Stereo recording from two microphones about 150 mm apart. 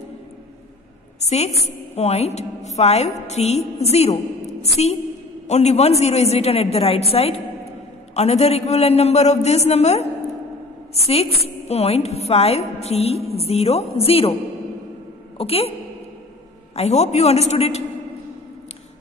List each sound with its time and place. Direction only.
1.2 s a sound: 45° left (ahead or behind)
1.6 s a woman's voice: 45° left (ahead or behind)
15.3 s a woman's voice: 40° left (ahead or behind)
16.7 s a woman's voice: 45° left (ahead or behind)